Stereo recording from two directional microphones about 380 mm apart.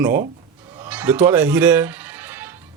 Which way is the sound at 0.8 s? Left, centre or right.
Centre.